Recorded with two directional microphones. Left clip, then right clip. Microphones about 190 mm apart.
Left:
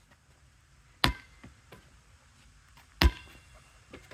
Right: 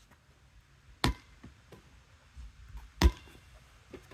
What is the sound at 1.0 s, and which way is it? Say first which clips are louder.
Chop: left 5 dB; 10° right (ahead or behind).